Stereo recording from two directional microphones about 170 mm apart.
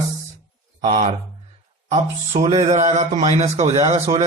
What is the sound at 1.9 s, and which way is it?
A man's voice, 40° right (ahead or behind).